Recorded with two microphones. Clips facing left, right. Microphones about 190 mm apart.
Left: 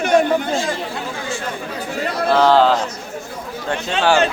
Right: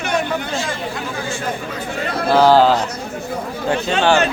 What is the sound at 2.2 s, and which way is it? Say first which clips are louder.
A man's voice: right 2 dB; 5° right (ahead or behind).